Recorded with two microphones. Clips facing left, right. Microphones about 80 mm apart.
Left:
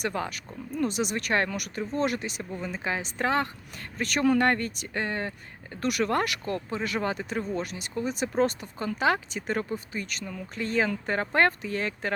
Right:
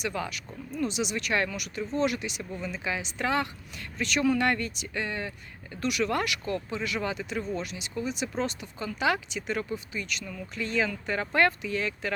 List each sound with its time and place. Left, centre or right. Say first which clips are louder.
0.0 s speech: left 2 dB; left